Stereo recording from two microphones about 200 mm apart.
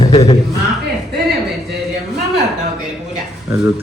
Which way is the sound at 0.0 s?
30° left (ahead or behind).